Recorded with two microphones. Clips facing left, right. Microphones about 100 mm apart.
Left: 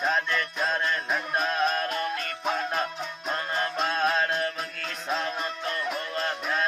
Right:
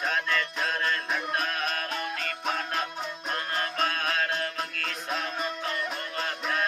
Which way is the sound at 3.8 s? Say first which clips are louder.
Left 4 dB; 20° left (ahead or behind).